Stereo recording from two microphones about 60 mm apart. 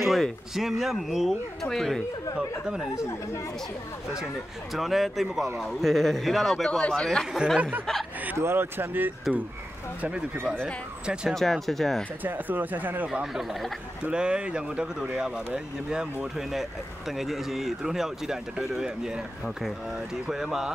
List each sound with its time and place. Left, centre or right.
0.0 s speech: centre
2.7 s speech: centre
4.7 s speech: centre
7.3 s speech: centre
8.4 s speech: right
10.3 s speech: right
11.3 s speech: centre
12.2 s speech: right
13.1 s speech: centre
14.0 s speech: centre
17.2 s speech: centre